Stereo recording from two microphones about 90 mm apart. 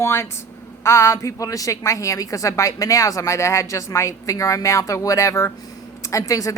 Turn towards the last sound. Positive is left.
turn(degrees=40)  # may be behind; listen again after turning